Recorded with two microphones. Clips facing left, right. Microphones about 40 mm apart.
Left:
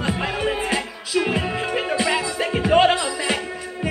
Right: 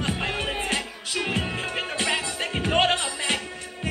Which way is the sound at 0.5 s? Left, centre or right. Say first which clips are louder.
Left 4 dB; left.